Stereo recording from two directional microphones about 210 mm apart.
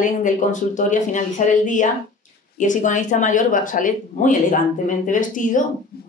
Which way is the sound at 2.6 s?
35° left (ahead or behind).